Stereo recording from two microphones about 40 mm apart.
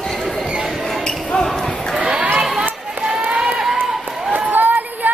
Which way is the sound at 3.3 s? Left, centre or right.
Centre.